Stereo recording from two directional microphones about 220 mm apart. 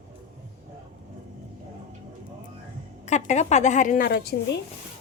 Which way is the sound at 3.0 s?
30° left (ahead or behind).